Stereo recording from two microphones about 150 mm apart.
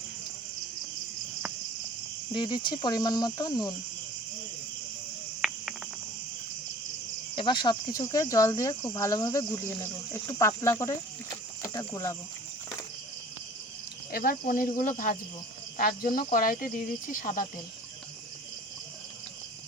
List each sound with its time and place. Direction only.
2.3 s speech: 35° left (ahead or behind)
5.4 s cricket: centre (ahead or behind)
7.3 s speech: 30° left (ahead or behind)
14.1 s speech: 80° left; by 15.2 s 60° left (ahead or behind)
15.8 s speech: 75° left (ahead or behind); by 17.4 s 60° left (ahead or behind)